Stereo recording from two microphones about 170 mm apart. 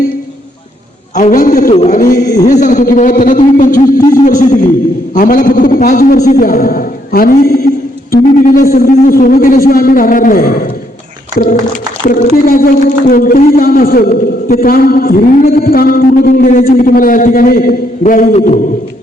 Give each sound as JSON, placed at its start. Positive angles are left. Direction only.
{"t": 1.1, "sound": "a man's voice", "side_deg": 50}
{"t": 2.2, "sound": "a sound", "side_deg": 20}
{"t": 2.5, "sound": "a man's voice", "side_deg": 50}
{"t": 12.0, "sound": "speech", "side_deg": 50}